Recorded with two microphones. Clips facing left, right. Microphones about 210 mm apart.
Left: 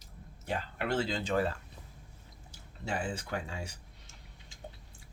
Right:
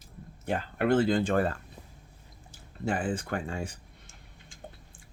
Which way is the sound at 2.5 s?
50° right (ahead or behind).